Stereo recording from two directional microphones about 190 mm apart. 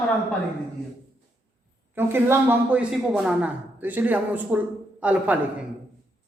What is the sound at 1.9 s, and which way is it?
Speech, 10° right (ahead or behind).